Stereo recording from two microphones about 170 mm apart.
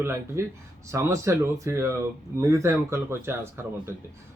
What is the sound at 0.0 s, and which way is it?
Speech, 15° right (ahead or behind).